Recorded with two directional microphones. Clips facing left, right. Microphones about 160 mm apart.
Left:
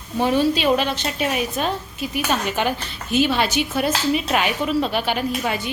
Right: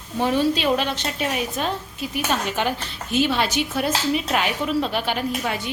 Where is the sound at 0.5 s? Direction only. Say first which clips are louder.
Left 2 dB; 10° left (ahead or behind).